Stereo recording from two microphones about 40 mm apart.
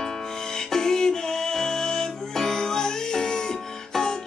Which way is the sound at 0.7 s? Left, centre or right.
Centre.